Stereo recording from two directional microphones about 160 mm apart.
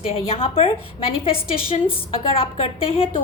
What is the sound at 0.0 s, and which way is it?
A woman's voice, 35° left (ahead or behind).